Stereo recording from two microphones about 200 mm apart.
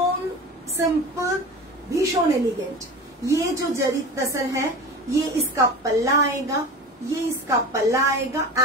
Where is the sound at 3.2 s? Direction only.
15° right (ahead or behind).